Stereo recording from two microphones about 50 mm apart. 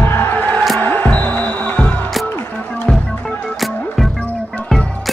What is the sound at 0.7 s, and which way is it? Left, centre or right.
Music, left.